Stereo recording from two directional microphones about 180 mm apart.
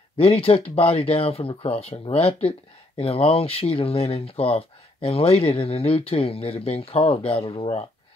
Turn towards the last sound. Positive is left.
turn(degrees=30)  # may be behind; listen again after turning